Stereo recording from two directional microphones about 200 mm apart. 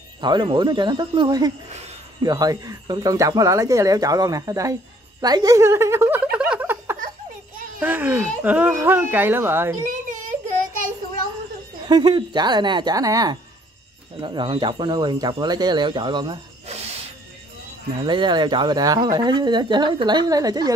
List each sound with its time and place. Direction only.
0.2 s speech: 20° right (ahead or behind)
5.2 s a sound: 20° right (ahead or behind)
7.8 s speech: 10° right (ahead or behind)
11.9 s speech: 20° right (ahead or behind)
18.0 s speech: 25° right (ahead or behind)